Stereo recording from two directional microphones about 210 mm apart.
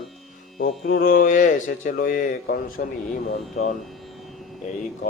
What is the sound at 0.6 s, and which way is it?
Speech, 45° left (ahead or behind).